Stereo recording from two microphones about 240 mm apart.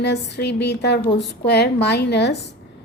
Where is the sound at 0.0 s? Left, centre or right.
Left.